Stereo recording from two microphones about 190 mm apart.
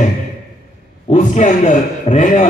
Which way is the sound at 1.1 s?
40° left (ahead or behind).